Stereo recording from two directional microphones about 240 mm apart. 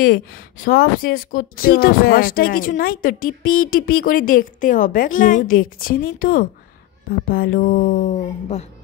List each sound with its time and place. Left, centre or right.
0.0 s a woman's voice: left